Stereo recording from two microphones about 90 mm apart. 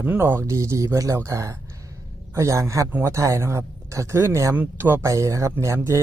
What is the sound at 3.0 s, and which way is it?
Speech, 35° right (ahead or behind).